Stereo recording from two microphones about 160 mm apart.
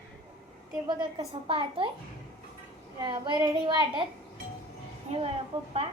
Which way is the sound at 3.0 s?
30° right (ahead or behind).